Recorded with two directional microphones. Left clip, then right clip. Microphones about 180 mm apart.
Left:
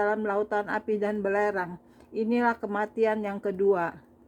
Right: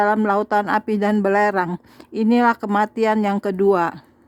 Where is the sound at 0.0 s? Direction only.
25° right (ahead or behind).